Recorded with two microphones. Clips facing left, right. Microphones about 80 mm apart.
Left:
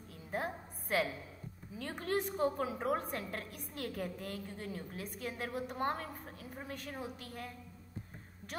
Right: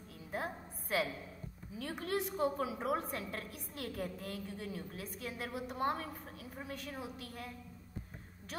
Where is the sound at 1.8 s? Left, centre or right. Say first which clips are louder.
Left 1 dB; left.